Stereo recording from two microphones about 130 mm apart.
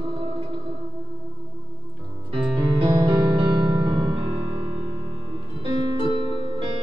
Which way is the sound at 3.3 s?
40° right (ahead or behind).